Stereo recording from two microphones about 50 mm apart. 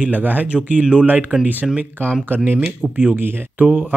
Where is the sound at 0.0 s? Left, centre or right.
Right.